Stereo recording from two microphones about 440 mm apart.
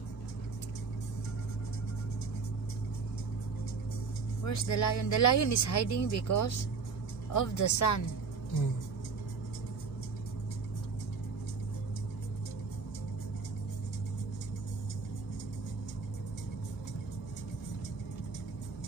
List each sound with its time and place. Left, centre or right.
4.5 s speech: left